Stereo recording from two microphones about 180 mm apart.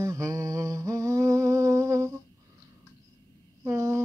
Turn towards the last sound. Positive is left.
turn(degrees=-15)  # may be behind; listen again after turning